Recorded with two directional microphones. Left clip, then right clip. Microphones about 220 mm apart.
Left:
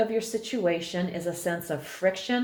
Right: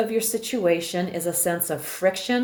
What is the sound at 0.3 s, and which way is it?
Speech, 40° right (ahead or behind).